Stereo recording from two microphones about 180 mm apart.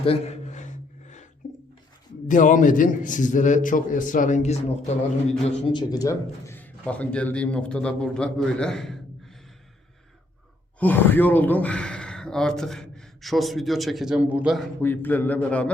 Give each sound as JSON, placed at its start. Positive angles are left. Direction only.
{"t": 0.0, "sound": "a sound", "side_deg": 35}
{"t": 2.2, "sound": "a man's voice", "side_deg": 45}
{"t": 5.7, "sound": "speech", "side_deg": 20}
{"t": 10.8, "sound": "speech", "side_deg": 10}
{"t": 14.8, "sound": "a man's voice", "side_deg": 10}